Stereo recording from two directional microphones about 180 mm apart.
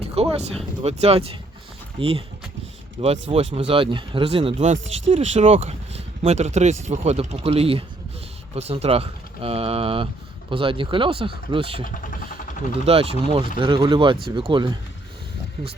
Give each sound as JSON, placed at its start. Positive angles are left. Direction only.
{"t": 0.0, "sound": "speech", "side_deg": -35}